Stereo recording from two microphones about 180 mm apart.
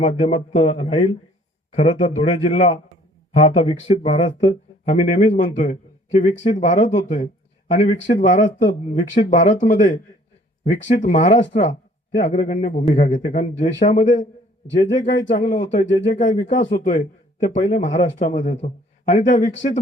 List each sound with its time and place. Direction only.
0.0 s speech: 35° left (ahead or behind)
4.9 s speech: 45° left (ahead or behind)